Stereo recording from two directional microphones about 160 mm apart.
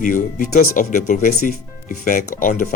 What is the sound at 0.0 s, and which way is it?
Speech, 55° left (ahead or behind).